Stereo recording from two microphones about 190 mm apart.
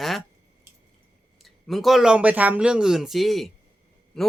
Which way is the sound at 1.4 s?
Centre (ahead or behind).